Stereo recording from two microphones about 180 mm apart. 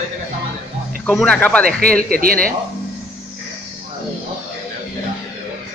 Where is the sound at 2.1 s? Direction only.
55° right (ahead or behind).